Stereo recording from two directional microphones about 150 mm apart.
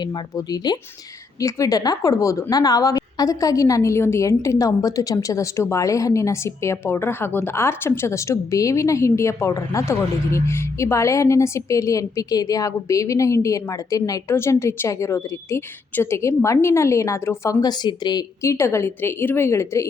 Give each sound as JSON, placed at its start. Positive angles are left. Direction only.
{"t": 0.0, "sound": "speech", "side_deg": 25}